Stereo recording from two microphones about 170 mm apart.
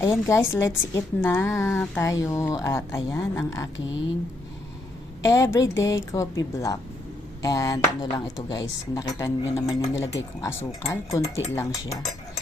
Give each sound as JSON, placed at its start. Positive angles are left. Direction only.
{"t": 0.0, "sound": "a woman's voice", "side_deg": 20}
{"t": 5.2, "sound": "a woman's voice", "side_deg": 20}